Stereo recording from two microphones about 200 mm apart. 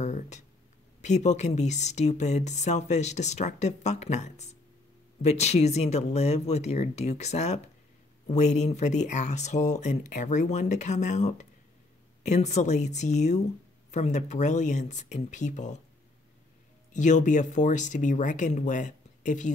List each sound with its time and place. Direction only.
0.0 s a sound: 35° left (ahead or behind)
1.0 s speech: 35° left (ahead or behind)
16.9 s speech: 35° left (ahead or behind)